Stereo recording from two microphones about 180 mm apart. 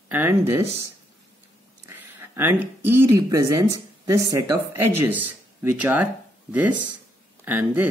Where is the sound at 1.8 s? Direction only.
10° right (ahead or behind).